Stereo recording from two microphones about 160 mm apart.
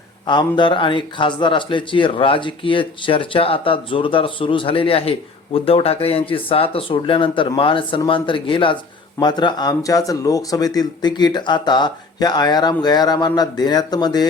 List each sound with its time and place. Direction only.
0.3 s speech: 30° left (ahead or behind)